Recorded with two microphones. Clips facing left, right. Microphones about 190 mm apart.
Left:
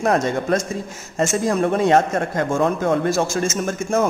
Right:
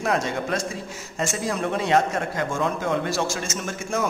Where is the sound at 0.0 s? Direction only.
45° left (ahead or behind).